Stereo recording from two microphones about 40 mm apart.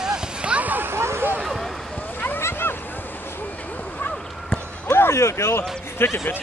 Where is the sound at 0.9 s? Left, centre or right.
Right.